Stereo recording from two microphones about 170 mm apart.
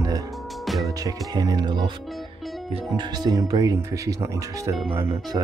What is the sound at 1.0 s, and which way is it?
Speech, 20° right (ahead or behind).